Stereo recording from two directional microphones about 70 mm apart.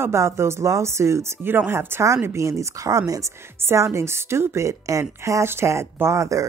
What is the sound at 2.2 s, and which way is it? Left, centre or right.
A woman's voice, right.